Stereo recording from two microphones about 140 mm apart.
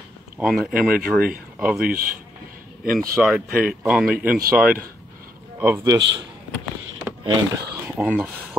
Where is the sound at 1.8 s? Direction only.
90° right.